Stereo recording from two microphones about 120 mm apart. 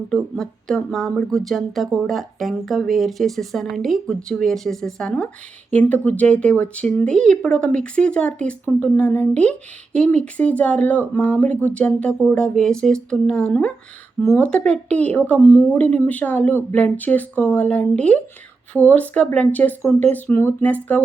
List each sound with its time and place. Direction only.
0.1 s speech: 5° left (ahead or behind)